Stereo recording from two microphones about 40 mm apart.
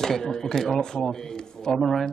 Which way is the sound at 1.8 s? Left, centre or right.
Centre.